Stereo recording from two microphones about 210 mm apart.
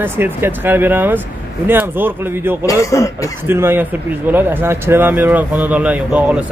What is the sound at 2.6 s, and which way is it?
Speech, 15° left (ahead or behind).